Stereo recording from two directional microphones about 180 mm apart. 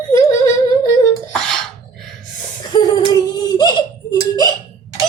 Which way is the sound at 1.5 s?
Centre (ahead or behind).